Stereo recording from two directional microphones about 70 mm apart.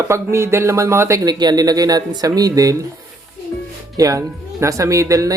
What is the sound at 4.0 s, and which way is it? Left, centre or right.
Speech, right.